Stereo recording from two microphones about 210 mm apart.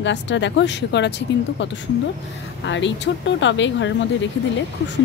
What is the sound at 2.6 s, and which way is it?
Speech, 60° left (ahead or behind).